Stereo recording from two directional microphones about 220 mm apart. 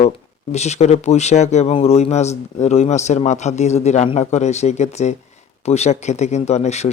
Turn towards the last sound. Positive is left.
turn(degrees=30)  # may be behind; listen again after turning